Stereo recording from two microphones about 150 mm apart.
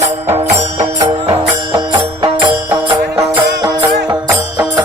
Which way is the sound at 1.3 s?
25° right (ahead or behind).